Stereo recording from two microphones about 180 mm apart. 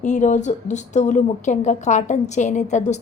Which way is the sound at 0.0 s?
40° left (ahead or behind).